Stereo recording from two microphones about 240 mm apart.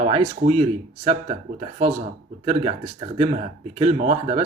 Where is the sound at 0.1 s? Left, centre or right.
Right.